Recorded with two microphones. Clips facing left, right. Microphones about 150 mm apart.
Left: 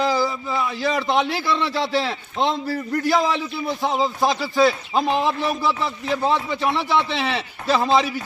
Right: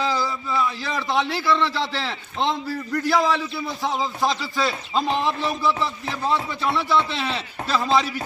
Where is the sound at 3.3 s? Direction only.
15° left (ahead or behind).